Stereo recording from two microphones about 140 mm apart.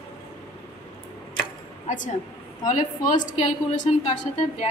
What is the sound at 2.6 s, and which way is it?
A woman's voice, 60° left (ahead or behind).